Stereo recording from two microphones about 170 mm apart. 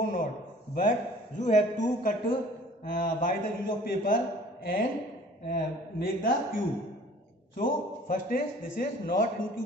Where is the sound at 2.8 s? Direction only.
55° left (ahead or behind).